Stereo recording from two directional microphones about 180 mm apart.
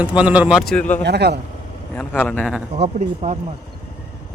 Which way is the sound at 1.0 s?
65° right (ahead or behind).